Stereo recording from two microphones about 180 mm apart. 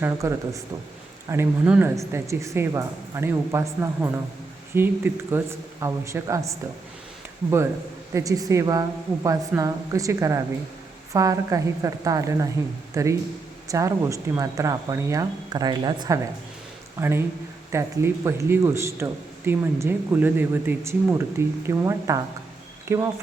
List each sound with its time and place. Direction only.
0.0 s speech: 15° right (ahead or behind)
8.1 s speech: 20° right (ahead or behind)